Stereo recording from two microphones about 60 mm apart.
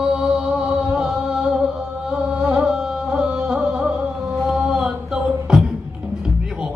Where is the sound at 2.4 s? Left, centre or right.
Centre.